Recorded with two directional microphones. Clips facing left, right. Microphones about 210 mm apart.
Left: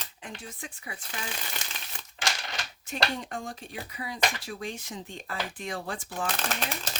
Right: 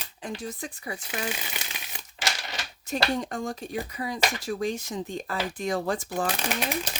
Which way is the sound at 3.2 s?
40° right (ahead or behind).